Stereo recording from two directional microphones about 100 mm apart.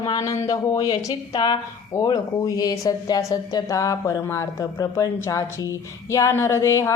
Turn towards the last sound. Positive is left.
turn(degrees=30)  # may be behind; listen again after turning